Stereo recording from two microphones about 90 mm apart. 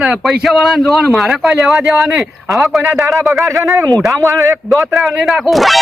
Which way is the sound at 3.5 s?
35° right (ahead or behind).